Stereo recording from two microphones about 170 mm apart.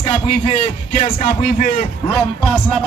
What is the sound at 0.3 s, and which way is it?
A man's voice, 45° left (ahead or behind).